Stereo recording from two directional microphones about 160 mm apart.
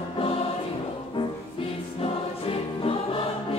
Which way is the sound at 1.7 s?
35° left (ahead or behind).